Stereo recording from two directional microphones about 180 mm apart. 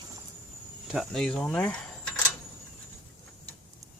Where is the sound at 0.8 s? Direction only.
Centre (ahead or behind).